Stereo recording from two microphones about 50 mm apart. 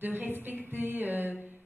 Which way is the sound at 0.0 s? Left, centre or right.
Right.